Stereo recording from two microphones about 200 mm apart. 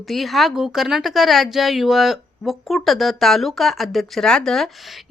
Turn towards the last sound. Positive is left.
turn(degrees=0)  # may be behind; listen again after turning